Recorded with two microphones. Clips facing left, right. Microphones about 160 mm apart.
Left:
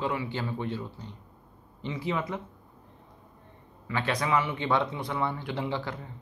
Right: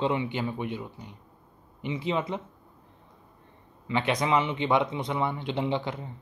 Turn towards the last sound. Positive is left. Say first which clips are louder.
# right 3 dB
turn(degrees=-20)  # may be behind; listen again after turning